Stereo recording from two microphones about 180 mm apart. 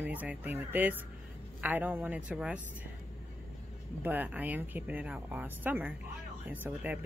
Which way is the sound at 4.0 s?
10° right (ahead or behind).